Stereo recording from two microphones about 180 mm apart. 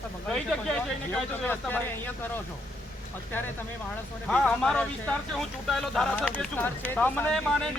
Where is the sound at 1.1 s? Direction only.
10° left (ahead or behind).